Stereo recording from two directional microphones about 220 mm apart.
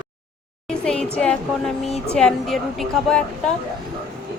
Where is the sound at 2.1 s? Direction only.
5° left (ahead or behind).